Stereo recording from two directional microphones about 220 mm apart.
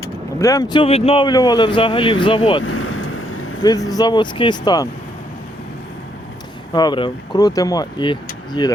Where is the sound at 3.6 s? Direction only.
15° left (ahead or behind).